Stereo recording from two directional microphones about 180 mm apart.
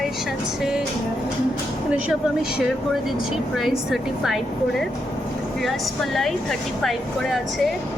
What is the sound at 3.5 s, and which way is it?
Speech, centre (ahead or behind).